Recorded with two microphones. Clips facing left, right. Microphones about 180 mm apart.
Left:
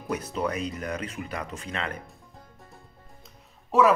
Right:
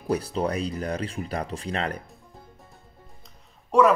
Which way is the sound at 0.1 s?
30° right (ahead or behind).